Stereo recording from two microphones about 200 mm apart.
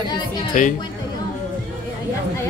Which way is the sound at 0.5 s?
40° left (ahead or behind).